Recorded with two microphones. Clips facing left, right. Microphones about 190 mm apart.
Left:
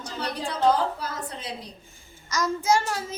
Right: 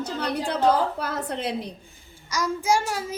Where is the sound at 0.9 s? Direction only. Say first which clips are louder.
Right 5 dB; 60° right (ahead or behind).